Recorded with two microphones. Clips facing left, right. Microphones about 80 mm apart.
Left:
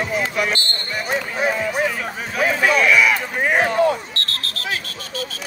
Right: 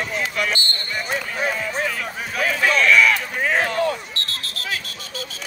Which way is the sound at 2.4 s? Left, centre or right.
Centre.